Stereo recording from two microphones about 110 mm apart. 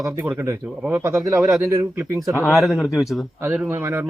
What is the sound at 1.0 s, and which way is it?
Speech, 25° right (ahead or behind).